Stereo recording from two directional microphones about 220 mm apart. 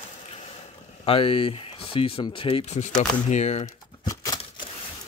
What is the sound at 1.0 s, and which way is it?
Speech, 25° left (ahead or behind).